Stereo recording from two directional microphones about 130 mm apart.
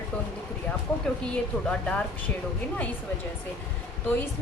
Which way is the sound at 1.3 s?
5° left (ahead or behind).